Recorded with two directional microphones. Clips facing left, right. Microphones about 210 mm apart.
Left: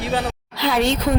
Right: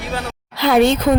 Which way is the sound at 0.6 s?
55° right (ahead or behind).